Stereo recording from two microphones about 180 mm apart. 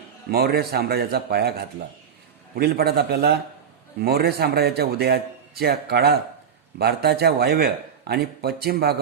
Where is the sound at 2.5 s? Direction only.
60° right (ahead or behind).